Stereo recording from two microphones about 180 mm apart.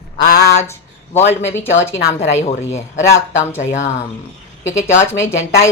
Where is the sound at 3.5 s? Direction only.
40° left (ahead or behind).